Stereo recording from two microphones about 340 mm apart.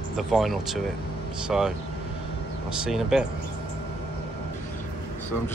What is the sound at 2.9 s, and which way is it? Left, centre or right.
Speech, centre.